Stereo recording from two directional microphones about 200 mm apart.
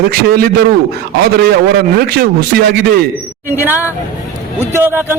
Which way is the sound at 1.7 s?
50° right (ahead or behind).